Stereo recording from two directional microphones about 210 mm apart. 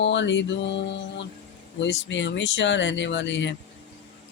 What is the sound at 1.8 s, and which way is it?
Speech, 60° left (ahead or behind).